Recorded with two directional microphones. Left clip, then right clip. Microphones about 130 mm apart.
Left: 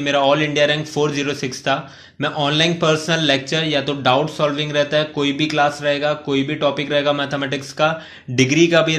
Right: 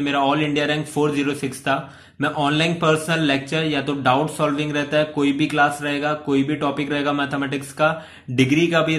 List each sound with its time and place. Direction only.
0.0 s a man's voice: 25° left (ahead or behind)